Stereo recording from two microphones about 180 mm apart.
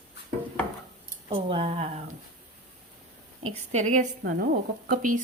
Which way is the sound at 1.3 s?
30° right (ahead or behind).